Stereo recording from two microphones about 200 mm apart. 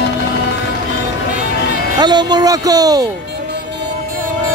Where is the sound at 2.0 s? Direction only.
20° right (ahead or behind).